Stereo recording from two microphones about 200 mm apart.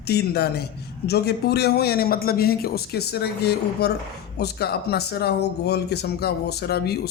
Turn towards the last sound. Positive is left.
turn(degrees=55)  # may be behind; listen again after turning